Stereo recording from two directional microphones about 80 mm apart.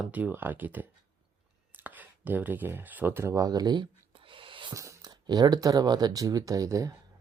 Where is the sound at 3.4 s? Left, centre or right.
Right.